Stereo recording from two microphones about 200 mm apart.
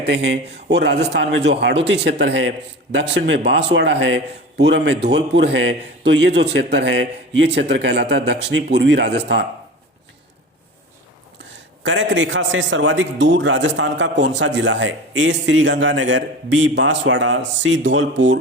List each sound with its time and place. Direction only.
0.0 s a man's voice: 55° right (ahead or behind)
11.3 s a man's voice: 70° right (ahead or behind)